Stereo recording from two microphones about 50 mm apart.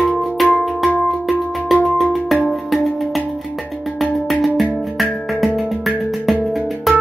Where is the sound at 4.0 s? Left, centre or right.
Centre.